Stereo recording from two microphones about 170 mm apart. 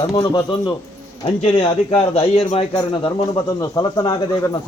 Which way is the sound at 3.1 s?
20° left (ahead or behind).